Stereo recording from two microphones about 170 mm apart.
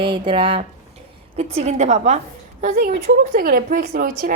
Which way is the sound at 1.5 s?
40° right (ahead or behind).